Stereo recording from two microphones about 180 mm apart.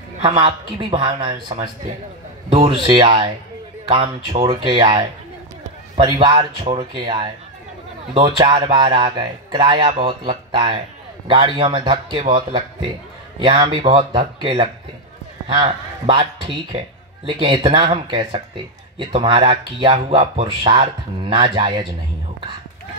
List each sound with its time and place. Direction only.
0.2 s speech: 30° right (ahead or behind)
6.0 s speech: 25° right (ahead or behind)